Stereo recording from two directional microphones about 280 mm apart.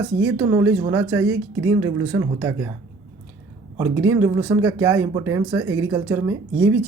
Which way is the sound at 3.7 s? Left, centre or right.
Centre.